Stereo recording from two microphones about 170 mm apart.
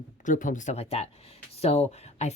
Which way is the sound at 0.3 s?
50° left (ahead or behind).